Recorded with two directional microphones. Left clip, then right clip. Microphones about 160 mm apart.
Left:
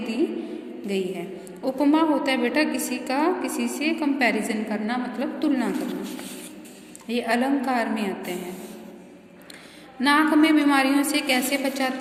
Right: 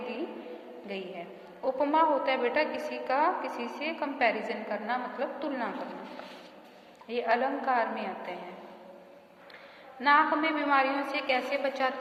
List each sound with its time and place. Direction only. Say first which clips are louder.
0.9 s a woman's voice: left 11 dB; 10° left (ahead or behind)
7.1 s a woman's voice: left 4 dB; 15° left (ahead or behind)
10.0 s a woman's voice: left 5 dB; 15° left (ahead or behind)